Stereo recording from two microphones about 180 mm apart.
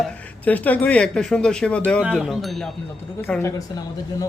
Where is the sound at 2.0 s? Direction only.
5° right (ahead or behind).